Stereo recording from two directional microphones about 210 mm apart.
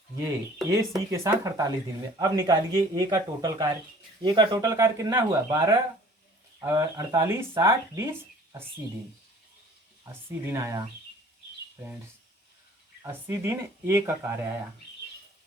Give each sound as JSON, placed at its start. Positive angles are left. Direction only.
{"t": 0.2, "sound": "speech", "side_deg": -15}
{"t": 10.4, "sound": "speech", "side_deg": -15}
{"t": 13.0, "sound": "speech", "side_deg": -10}